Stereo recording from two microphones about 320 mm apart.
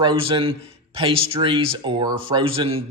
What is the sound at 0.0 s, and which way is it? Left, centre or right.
Speech, centre.